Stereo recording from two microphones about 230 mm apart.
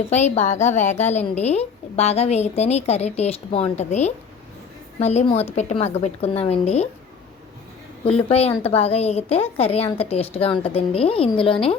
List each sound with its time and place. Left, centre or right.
0.1 s a woman's voice: left
8.3 s a woman's voice: left